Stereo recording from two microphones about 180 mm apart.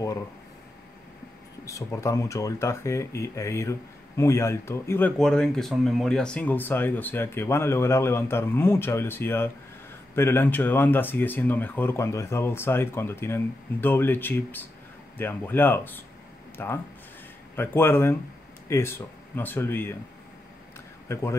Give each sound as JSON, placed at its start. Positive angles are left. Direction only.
{"t": 1.7, "sound": "speech", "side_deg": 15}
{"t": 21.1, "sound": "speech", "side_deg": 15}